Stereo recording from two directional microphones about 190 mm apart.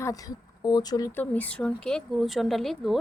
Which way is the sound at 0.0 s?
20° left (ahead or behind).